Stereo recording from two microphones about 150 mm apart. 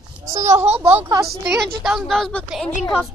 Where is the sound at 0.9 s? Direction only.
20° right (ahead or behind).